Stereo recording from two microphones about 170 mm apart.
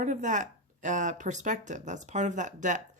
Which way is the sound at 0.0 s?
45° right (ahead or behind).